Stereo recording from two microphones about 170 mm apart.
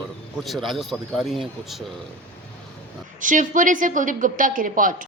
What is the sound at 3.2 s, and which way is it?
A woman's voice, 50° right (ahead or behind).